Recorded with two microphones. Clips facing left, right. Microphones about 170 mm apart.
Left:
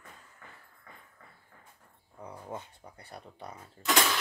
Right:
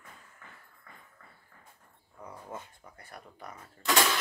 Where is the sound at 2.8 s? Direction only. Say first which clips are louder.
Left 2 dB; 30° left (ahead or behind).